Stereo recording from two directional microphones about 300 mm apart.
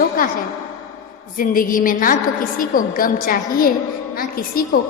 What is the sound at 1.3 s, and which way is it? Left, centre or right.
A woman's voice, left.